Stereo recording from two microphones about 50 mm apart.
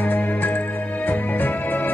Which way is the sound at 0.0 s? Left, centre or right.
Left.